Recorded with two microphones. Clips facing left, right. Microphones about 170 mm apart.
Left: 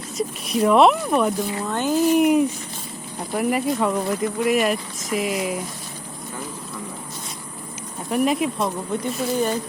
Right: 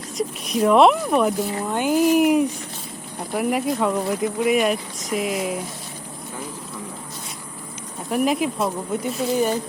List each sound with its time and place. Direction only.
0.2 s speech: centre (ahead or behind)
1.6 s speech: 15° right (ahead or behind)
8.1 s speech: centre (ahead or behind)